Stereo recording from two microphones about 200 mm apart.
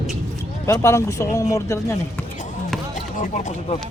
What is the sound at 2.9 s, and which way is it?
Speech, 40° left (ahead or behind).